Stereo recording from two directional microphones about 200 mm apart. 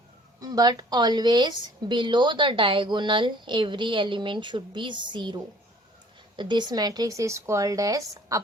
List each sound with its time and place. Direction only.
0.4 s a woman's voice: 20° right (ahead or behind)